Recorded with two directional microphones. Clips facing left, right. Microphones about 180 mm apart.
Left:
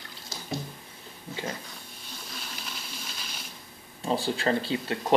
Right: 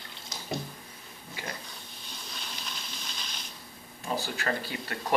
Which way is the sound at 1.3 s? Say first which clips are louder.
Left 5 dB; 25° left (ahead or behind).